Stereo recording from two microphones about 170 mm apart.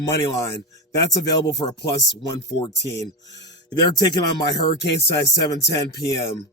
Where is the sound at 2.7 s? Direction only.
90° left.